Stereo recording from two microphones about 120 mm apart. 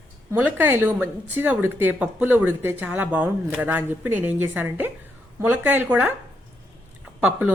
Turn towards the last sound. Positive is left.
turn(degrees=-10)  # may be behind; listen again after turning